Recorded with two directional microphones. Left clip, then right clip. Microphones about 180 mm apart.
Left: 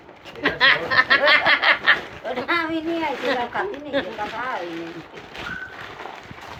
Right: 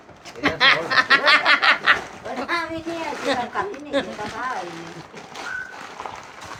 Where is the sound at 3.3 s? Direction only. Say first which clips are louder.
Right 1 dB; 20° right (ahead or behind).